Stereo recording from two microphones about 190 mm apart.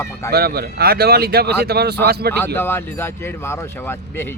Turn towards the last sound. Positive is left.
turn(degrees=10)  # may be behind; listen again after turning